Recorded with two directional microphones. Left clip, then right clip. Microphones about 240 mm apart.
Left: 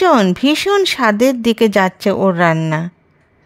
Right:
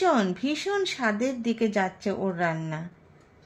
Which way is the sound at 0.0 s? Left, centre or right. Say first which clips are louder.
Left 12 dB; left.